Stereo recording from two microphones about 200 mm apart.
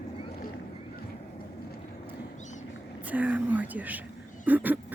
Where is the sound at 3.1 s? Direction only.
10° right (ahead or behind).